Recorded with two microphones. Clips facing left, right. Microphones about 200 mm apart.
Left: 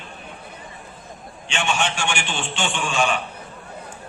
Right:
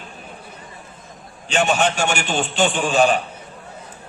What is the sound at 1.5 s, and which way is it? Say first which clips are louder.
A man's voice: right 6 dB; 40° right (ahead or behind).